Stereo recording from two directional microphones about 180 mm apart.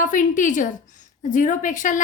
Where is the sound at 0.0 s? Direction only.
45° left (ahead or behind).